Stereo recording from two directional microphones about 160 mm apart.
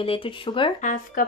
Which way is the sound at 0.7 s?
55° left (ahead or behind).